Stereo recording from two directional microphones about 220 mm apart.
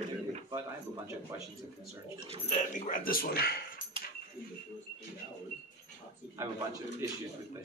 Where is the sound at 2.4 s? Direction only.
30° left (ahead or behind).